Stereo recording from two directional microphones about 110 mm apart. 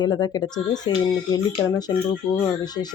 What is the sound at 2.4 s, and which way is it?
Speech, 35° left (ahead or behind).